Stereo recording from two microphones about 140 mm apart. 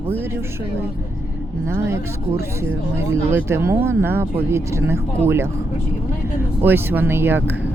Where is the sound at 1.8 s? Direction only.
20° right (ahead or behind).